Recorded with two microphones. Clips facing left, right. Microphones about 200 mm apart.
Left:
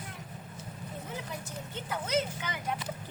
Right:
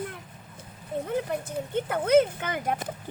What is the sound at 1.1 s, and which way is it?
Speech, 55° right (ahead or behind).